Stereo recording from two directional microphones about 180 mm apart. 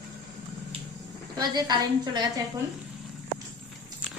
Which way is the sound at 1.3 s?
25° right (ahead or behind).